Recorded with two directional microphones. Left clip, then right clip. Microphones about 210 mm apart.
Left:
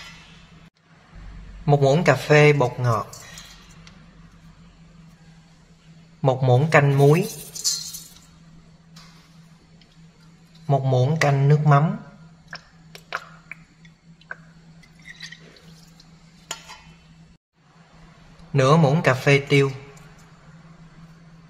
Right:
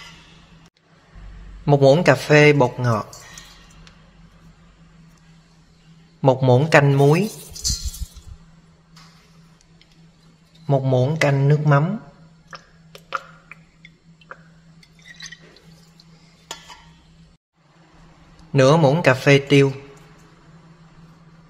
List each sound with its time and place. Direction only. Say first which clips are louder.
1.7 s speech: right 4 dB; 15° right (ahead or behind)
6.2 s speech: right 4 dB; 20° right (ahead or behind)
10.7 s speech: right 2 dB; 15° right (ahead or behind)
18.5 s speech: right 3 dB; 20° right (ahead or behind)